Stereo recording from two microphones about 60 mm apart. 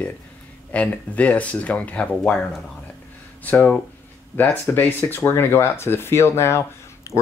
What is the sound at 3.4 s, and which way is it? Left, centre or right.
Speech, left.